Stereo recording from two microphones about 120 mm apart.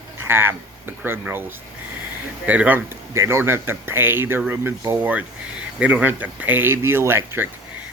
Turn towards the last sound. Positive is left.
turn(degrees=-20)  # may be behind; listen again after turning